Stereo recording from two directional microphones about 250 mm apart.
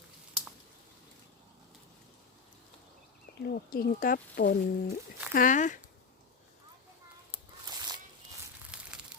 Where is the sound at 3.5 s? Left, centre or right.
Left.